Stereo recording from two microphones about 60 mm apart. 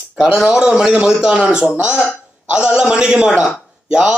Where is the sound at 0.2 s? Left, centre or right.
Centre.